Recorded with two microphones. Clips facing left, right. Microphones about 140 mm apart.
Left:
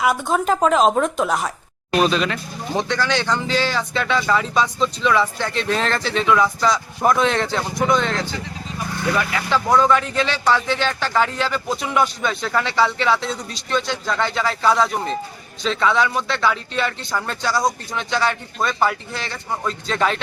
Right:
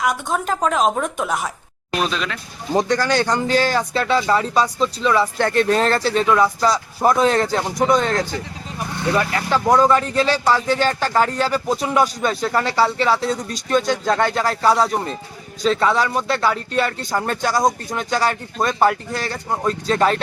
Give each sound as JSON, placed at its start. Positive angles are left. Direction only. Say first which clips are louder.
{"t": 0.0, "sound": "a woman's voice", "louder": "left 2 dB", "side_deg": 5}
{"t": 2.7, "sound": "speech", "louder": "right 4 dB", "side_deg": -40}
{"t": 5.4, "sound": "speech", "louder": "right 5 dB", "side_deg": -50}